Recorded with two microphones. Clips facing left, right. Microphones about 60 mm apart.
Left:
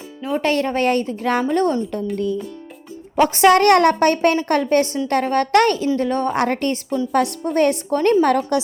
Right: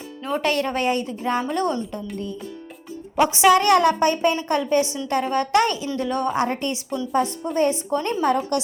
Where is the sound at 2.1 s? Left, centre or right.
Left.